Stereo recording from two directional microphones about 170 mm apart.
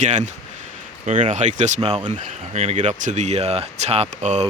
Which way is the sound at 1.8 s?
30° right (ahead or behind).